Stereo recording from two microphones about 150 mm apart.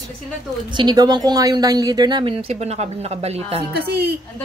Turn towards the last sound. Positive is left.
turn(degrees=-90)